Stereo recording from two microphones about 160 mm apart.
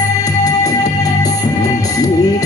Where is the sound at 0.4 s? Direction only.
20° left (ahead or behind).